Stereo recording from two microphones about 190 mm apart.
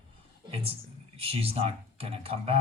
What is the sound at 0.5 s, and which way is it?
Speech, 30° right (ahead or behind).